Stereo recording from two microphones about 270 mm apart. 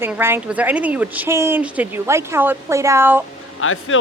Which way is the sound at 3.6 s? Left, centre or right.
Left.